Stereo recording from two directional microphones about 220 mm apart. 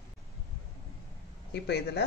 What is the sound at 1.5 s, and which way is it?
Speech, 50° left (ahead or behind).